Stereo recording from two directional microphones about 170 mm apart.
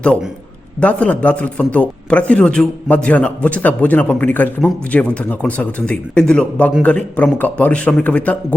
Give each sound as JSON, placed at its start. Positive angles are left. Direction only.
{"t": 0.0, "sound": "a man's voice", "side_deg": 5}